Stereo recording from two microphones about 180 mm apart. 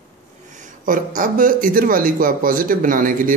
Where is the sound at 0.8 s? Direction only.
50° right (ahead or behind).